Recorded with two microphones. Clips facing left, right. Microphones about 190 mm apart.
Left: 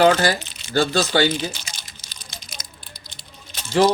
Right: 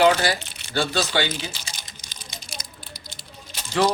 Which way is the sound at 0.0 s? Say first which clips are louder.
Left 2 dB; 45° left (ahead or behind).